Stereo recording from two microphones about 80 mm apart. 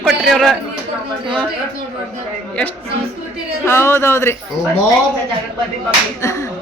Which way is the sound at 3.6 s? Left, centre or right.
Left.